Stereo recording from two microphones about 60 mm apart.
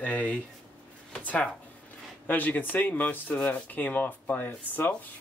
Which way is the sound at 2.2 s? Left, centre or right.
Left.